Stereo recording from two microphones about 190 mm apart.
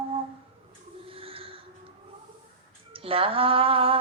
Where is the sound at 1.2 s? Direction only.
30° right (ahead or behind).